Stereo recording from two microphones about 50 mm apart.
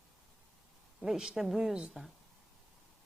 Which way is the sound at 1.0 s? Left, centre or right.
Centre.